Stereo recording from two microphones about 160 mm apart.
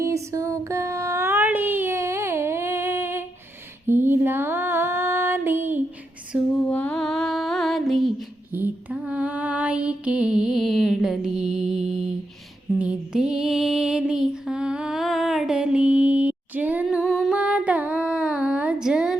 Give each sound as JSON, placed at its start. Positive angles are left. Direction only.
{"t": 0.0, "sound": "child singing", "side_deg": -20}
{"t": 3.8, "sound": "female singing", "side_deg": -15}
{"t": 6.6, "sound": "music", "side_deg": 10}
{"t": 8.5, "sound": "mantra", "side_deg": -10}
{"t": 12.8, "sound": "music", "side_deg": -5}
{"t": 17.0, "sound": "humming", "side_deg": 0}